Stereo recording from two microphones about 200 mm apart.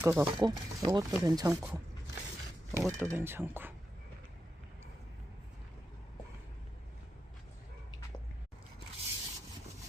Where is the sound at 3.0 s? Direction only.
10° right (ahead or behind).